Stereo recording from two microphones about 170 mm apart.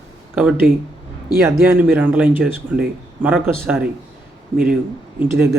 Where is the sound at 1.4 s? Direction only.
15° right (ahead or behind).